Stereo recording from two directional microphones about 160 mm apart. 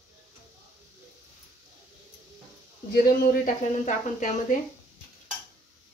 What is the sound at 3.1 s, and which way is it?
Speech, 55° left (ahead or behind).